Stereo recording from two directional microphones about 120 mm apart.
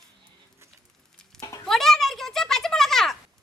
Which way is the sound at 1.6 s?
5° left (ahead or behind).